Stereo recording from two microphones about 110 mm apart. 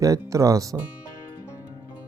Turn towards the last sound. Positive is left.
turn(degrees=-30)  # may be behind; listen again after turning